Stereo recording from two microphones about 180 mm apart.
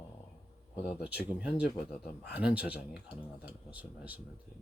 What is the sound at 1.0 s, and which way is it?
Speech, 5° right (ahead or behind).